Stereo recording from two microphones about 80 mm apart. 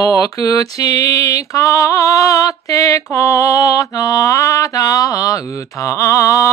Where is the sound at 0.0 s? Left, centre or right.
Left.